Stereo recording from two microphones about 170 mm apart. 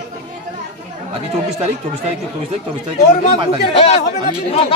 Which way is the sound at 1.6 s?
35° right (ahead or behind).